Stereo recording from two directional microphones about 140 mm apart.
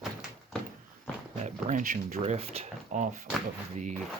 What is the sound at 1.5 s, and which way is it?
Speech, 60° right (ahead or behind).